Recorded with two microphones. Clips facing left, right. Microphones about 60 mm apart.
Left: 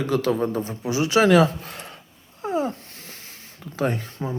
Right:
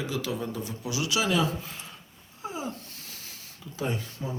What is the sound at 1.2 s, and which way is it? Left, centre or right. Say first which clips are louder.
Speech: left 11 dB; left.